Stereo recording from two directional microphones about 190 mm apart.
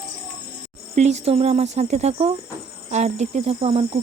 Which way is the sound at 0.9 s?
35° right (ahead or behind).